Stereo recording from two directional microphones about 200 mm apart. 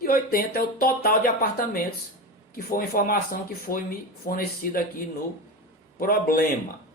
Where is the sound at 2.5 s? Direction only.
45° left (ahead or behind).